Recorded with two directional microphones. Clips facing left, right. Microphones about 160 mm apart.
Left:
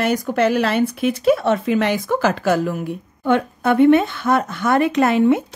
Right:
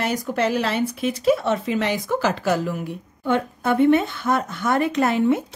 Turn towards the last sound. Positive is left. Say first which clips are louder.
# left 4 dB
turn(degrees=75)  # may be behind; listen again after turning